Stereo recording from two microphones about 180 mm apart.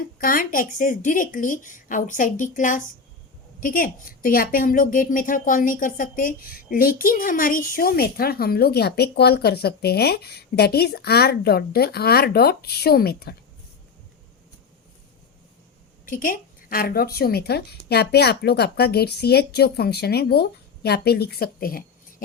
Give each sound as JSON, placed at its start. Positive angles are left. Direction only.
{"t": 0.2, "sound": "a woman's voice", "side_deg": 50}
{"t": 16.0, "sound": "a woman's voice", "side_deg": 50}